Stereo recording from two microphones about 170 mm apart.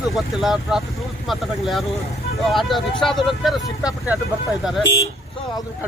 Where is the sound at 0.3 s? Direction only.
5° right (ahead or behind).